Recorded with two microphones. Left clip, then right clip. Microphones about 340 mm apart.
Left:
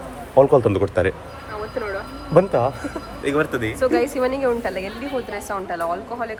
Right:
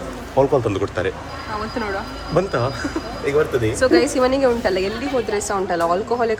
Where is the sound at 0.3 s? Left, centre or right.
Left.